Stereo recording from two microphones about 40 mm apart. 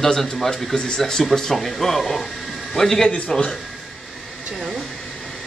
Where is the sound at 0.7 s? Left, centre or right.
Centre.